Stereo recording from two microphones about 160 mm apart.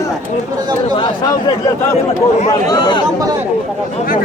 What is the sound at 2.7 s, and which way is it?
Speech, 25° left (ahead or behind).